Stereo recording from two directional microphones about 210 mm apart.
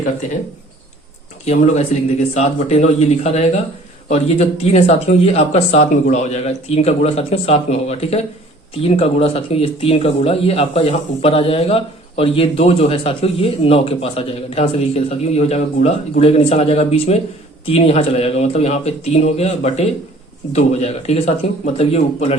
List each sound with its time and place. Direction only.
1.5 s speech: 35° left (ahead or behind)
4.1 s speech: 30° left (ahead or behind)